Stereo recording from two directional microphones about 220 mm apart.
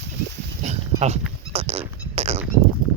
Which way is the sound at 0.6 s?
30° right (ahead or behind).